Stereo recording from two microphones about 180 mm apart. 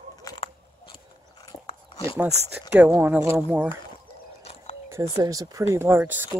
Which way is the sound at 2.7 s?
10° right (ahead or behind).